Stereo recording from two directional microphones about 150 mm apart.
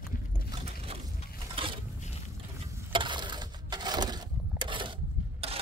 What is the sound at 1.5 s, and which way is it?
Mechanisms, 35° right (ahead or behind).